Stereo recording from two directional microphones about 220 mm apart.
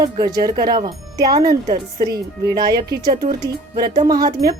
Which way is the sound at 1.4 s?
40° right (ahead or behind).